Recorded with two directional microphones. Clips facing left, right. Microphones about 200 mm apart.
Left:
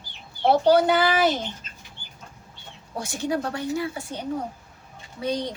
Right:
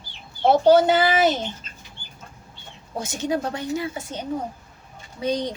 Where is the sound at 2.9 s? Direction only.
20° right (ahead or behind).